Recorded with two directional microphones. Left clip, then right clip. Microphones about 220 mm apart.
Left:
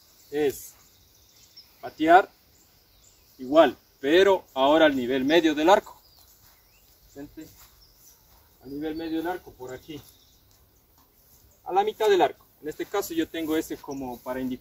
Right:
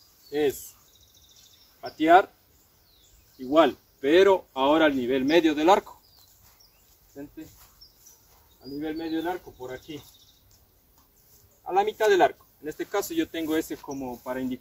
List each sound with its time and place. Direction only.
0.3 s speech: centre (ahead or behind)
1.8 s speech: centre (ahead or behind)
3.3 s speech: 10° left (ahead or behind)
7.2 s speech: 5° left (ahead or behind)
8.7 s speech: centre (ahead or behind)
11.6 s speech: 5° right (ahead or behind)